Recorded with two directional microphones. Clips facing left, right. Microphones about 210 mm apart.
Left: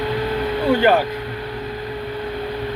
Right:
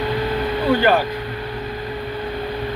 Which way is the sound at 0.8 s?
20° left (ahead or behind).